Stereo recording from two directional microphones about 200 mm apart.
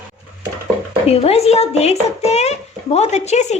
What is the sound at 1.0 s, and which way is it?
Speech, 30° left (ahead or behind).